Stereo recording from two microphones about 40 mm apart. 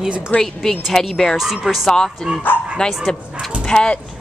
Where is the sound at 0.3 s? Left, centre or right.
Left.